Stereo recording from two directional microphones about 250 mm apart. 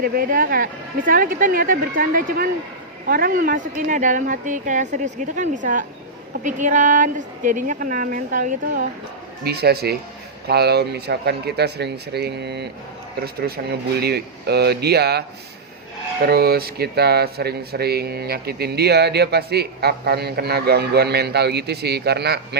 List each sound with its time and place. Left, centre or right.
0.0 s speech: right
16.2 s speech: right